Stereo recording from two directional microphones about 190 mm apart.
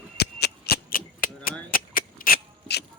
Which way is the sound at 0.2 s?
60° left (ahead or behind).